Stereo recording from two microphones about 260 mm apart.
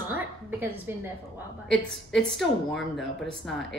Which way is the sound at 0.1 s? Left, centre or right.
Centre.